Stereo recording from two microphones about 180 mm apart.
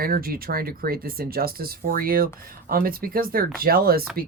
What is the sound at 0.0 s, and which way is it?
Speech, 55° right (ahead or behind).